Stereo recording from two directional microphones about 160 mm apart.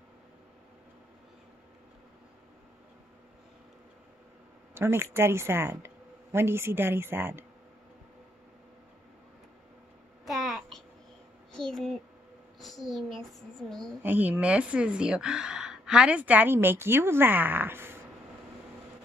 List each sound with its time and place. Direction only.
4.7 s speech: 15° right (ahead or behind)
10.2 s a sound: centre (ahead or behind)
11.5 s a child's voice: 5° left (ahead or behind)
14.0 s speech: 10° right (ahead or behind)